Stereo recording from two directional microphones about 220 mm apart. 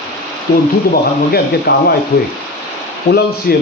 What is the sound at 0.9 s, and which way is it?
A man's voice, 45° left (ahead or behind).